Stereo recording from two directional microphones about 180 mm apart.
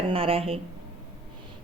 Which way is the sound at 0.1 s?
30° right (ahead or behind).